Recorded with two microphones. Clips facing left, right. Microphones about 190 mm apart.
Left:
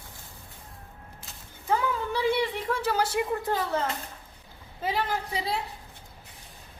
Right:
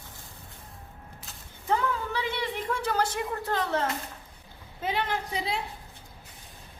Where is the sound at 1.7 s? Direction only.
10° left (ahead or behind).